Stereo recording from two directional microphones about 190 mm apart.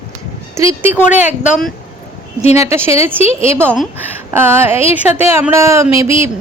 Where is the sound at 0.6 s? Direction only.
15° right (ahead or behind).